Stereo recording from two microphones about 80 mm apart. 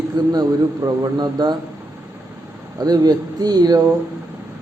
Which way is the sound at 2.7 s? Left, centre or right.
Right.